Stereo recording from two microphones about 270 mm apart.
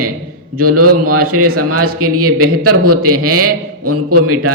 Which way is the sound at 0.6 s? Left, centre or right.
Right.